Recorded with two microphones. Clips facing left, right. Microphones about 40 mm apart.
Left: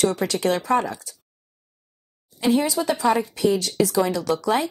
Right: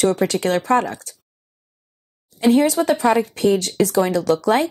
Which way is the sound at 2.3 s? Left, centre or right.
Right.